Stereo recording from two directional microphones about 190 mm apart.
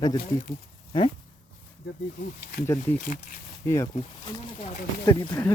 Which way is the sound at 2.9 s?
45° left (ahead or behind).